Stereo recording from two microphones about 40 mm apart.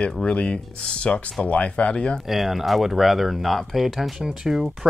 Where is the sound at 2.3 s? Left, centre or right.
Centre.